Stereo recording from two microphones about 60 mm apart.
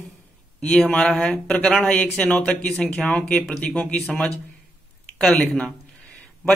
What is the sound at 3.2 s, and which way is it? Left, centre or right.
Speech, left.